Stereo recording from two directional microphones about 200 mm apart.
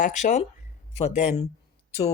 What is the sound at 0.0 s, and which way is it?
Speech, 40° left (ahead or behind).